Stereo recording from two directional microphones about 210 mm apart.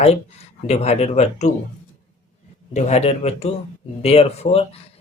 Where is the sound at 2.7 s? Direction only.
30° left (ahead or behind).